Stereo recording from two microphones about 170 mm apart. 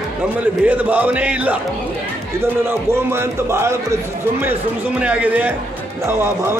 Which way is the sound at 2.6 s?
15° right (ahead or behind).